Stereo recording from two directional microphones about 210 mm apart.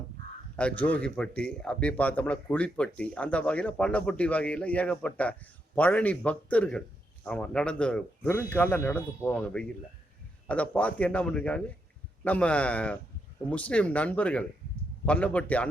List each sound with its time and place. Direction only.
0.5 s speech: 5° left (ahead or behind)